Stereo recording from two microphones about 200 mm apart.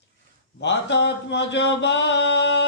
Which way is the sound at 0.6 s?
60° left (ahead or behind).